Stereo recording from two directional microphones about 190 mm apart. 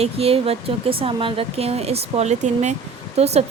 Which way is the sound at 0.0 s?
30° right (ahead or behind).